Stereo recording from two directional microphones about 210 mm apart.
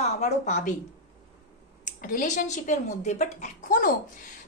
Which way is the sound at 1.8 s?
40° left (ahead or behind).